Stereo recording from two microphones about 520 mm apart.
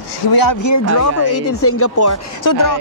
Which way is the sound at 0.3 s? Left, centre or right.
Left.